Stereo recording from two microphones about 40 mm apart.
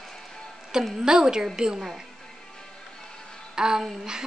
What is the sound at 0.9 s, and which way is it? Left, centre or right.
Speech, centre.